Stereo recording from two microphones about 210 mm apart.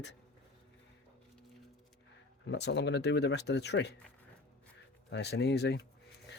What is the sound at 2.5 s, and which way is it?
Speech, 55° left (ahead or behind).